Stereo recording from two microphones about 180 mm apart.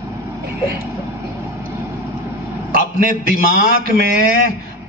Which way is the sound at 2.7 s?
50° right (ahead or behind).